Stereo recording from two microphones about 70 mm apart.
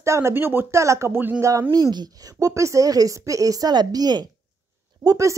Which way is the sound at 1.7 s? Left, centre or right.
Right.